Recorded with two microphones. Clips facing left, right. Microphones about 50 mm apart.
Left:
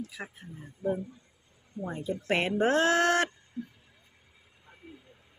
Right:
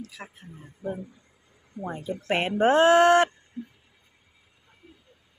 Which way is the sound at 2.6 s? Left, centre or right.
Right.